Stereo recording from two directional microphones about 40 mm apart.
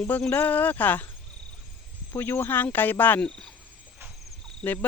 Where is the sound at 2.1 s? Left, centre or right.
Left.